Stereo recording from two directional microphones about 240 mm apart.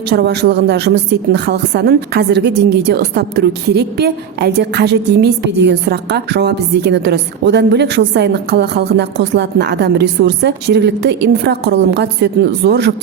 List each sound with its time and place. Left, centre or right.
0.1 s a woman's voice: right